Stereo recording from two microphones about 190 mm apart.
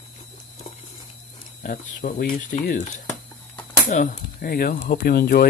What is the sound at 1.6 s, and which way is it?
Speech, 45° left (ahead or behind).